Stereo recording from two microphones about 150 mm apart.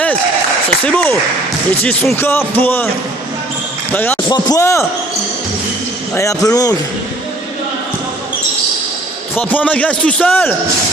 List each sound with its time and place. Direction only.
0.9 s a man's voice: 10° left (ahead or behind)
3.9 s a man's voice: 10° left (ahead or behind)
4.3 s a man's voice: 25° left (ahead or behind)
6.1 s a man's voice: 20° left (ahead or behind)
9.3 s a man's voice: 10° left (ahead or behind)